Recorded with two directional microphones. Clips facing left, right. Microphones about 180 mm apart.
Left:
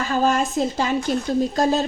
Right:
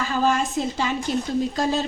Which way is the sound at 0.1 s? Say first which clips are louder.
Left 3 dB; 45° left (ahead or behind).